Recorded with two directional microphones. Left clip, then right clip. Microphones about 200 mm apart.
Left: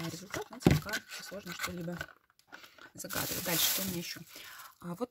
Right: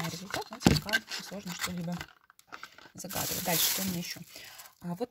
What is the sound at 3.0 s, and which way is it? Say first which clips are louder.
Speech: right 2 dB; 15° left (ahead or behind).